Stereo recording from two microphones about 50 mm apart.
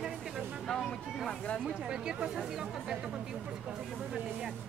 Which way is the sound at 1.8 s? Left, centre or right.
Centre.